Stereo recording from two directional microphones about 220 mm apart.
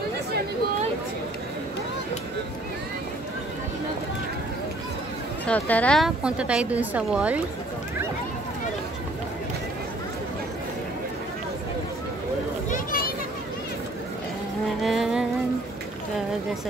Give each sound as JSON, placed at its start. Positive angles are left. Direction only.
{"t": 5.5, "sound": "a woman's voice", "side_deg": 5}
{"t": 12.7, "sound": "children playing", "side_deg": 40}
{"t": 14.8, "sound": "music", "side_deg": 0}